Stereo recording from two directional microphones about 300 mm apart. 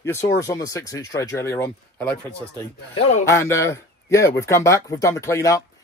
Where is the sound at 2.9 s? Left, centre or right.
Left.